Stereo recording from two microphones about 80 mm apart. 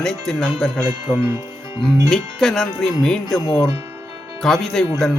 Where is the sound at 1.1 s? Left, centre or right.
Centre.